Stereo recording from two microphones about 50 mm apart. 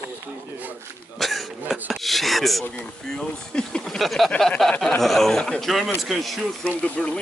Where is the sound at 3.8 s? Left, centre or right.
Centre.